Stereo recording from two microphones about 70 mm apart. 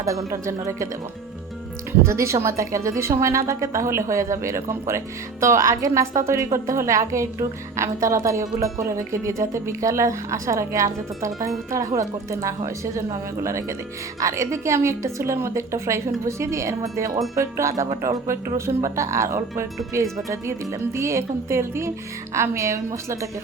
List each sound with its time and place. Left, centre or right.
0.0 s a woman's voice: right
2.0 s a woman's voice: right